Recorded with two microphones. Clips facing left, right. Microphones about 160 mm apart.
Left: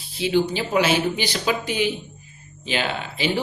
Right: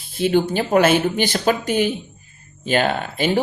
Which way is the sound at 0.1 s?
50° right (ahead or behind).